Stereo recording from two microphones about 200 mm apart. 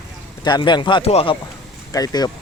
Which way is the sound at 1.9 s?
20° left (ahead or behind).